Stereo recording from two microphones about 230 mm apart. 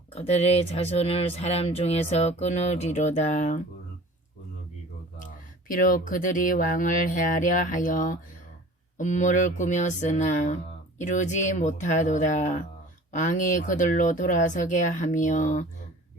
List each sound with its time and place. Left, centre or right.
0.1 s speech: left
5.2 s speech: left